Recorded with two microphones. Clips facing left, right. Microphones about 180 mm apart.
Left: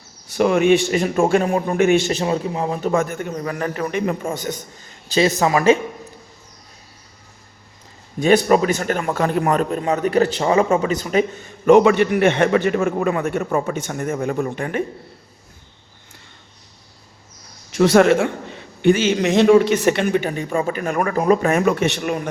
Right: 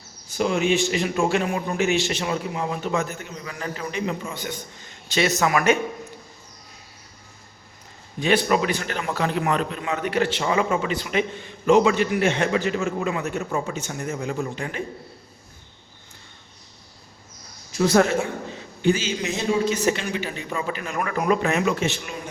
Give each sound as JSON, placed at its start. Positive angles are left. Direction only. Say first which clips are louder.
{"t": 0.3, "sound": "a man's voice", "louder": "left 6 dB", "side_deg": 60}
{"t": 2.1, "sound": "a man's voice", "louder": "left 5 dB", "side_deg": 30}
{"t": 5.4, "sound": "a man's voice", "louder": "left 4 dB", "side_deg": 30}
{"t": 8.2, "sound": "a man's voice", "louder": "left 6 dB", "side_deg": 45}
{"t": 17.7, "sound": "a man's voice", "louder": "left 6 dB", "side_deg": 85}